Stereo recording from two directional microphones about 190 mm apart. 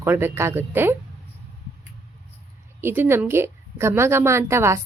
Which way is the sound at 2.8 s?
10° right (ahead or behind).